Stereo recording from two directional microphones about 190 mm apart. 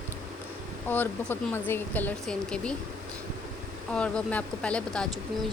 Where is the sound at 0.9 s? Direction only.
10° left (ahead or behind).